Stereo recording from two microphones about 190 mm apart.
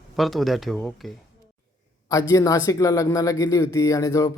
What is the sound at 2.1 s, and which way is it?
Speech, 15° left (ahead or behind).